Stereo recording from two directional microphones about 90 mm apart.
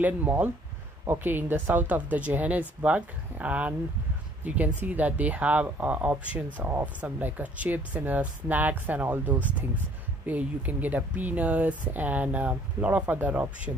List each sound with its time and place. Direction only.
0.0 s speech: 20° right (ahead or behind)